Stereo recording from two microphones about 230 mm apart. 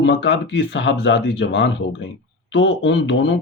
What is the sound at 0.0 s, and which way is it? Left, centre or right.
A man's voice, left.